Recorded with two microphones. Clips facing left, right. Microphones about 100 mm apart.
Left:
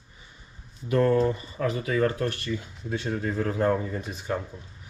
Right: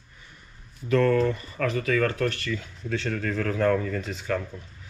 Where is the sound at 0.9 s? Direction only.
25° left (ahead or behind).